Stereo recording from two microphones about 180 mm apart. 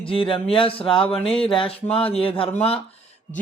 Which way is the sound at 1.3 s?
30° left (ahead or behind).